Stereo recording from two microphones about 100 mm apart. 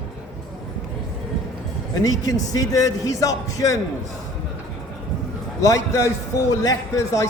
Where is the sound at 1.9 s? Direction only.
35° left (ahead or behind).